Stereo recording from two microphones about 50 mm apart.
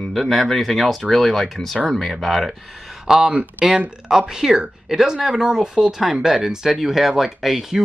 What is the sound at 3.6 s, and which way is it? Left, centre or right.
Speech, right.